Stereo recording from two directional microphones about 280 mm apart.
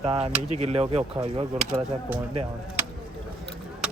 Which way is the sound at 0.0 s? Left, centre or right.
Right.